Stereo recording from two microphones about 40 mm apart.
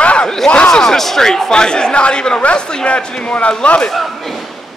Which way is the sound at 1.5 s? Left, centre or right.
Left.